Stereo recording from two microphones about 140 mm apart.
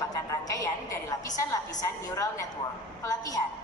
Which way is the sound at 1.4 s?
25° left (ahead or behind).